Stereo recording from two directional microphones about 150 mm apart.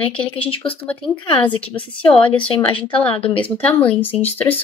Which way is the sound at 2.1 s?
10° left (ahead or behind).